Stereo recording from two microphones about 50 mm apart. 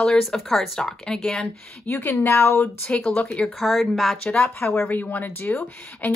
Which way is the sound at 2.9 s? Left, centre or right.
Left.